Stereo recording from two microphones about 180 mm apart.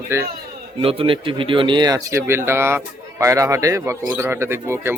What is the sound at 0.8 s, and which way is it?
Speech, 30° right (ahead or behind).